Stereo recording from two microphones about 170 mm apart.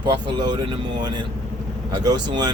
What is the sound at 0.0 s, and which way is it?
Speech, 25° right (ahead or behind).